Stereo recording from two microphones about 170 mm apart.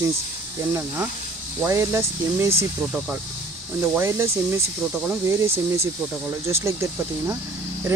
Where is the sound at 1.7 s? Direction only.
15° right (ahead or behind).